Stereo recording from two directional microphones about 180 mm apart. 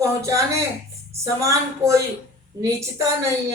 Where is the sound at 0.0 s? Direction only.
15° right (ahead or behind).